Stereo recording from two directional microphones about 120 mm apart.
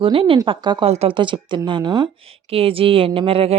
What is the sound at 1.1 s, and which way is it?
Speech, 45° right (ahead or behind).